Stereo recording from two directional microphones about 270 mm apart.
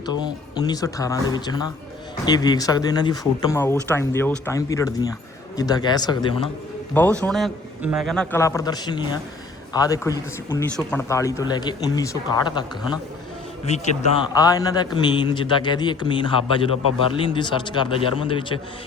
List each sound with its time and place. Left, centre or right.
0.0 s speech: centre
7.2 s a man's voice: centre